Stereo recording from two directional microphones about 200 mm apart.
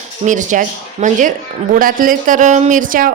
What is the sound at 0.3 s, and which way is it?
A woman's voice, 40° right (ahead or behind).